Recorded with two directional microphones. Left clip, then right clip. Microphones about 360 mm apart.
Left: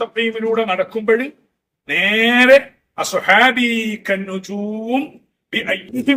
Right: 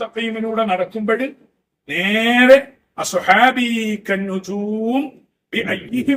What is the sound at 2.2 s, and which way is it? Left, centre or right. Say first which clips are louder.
A man's voice: right 1 dB; centre.